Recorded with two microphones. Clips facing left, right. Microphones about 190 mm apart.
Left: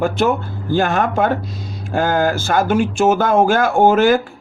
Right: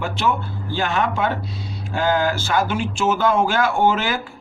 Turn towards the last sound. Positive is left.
turn(degrees=50)  # may be behind; listen again after turning